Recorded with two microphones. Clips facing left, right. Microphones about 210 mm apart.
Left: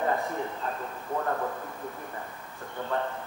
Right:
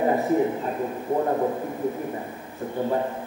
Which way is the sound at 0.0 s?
20° right (ahead or behind).